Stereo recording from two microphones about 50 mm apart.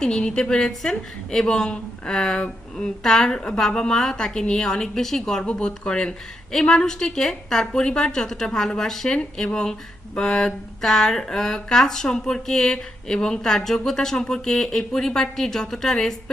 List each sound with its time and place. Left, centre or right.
0.0 s a woman's voice: centre